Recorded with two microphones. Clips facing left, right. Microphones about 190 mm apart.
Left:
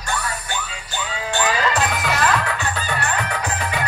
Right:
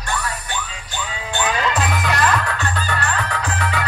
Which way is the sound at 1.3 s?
Centre (ahead or behind).